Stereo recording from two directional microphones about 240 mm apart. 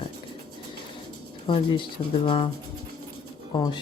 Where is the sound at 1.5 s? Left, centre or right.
Centre.